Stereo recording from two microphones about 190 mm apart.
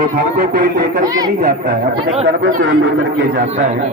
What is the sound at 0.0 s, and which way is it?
Speech, 50° right (ahead or behind).